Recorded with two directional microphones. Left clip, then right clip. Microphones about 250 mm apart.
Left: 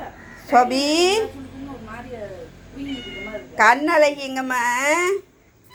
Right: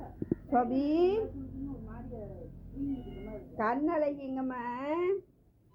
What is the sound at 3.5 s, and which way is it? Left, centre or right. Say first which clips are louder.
Speech: left 16 dB; centre.